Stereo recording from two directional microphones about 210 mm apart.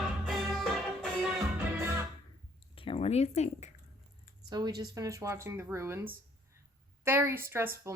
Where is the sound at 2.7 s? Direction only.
25° left (ahead or behind).